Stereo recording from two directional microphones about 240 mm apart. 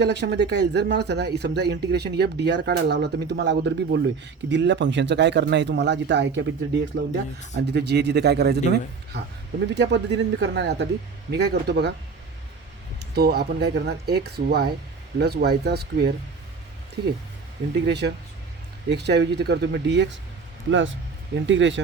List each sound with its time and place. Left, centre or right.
0.0 s speech: right
13.1 s speech: right